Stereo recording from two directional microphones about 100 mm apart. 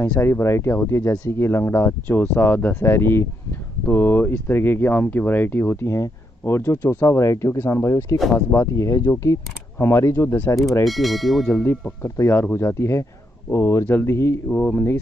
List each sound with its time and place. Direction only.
0.0 s speech: 20° left (ahead or behind)
8.2 s speech: centre (ahead or behind)
8.5 s speech: 25° left (ahead or behind)
10.9 s speech: centre (ahead or behind)
12.0 s speech: 25° left (ahead or behind)